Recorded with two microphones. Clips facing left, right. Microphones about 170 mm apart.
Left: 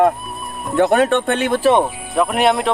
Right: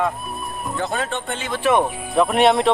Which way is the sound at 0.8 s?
65° left (ahead or behind).